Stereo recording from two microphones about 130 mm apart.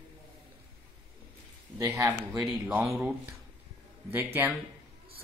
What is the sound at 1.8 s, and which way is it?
Speech, 25° right (ahead or behind).